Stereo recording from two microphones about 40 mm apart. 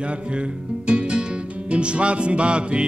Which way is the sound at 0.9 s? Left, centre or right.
Right.